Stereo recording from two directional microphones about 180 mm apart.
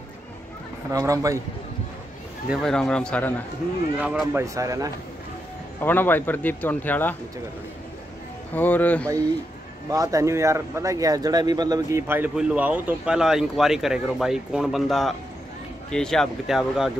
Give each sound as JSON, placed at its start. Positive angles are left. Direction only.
{"t": 0.9, "sound": "speech", "side_deg": -20}
{"t": 2.5, "sound": "speech", "side_deg": 5}
{"t": 4.0, "sound": "speech", "side_deg": -5}
{"t": 5.8, "sound": "a man's voice", "side_deg": 10}
{"t": 8.5, "sound": "a man's voice", "side_deg": 10}
{"t": 9.8, "sound": "speech", "side_deg": -20}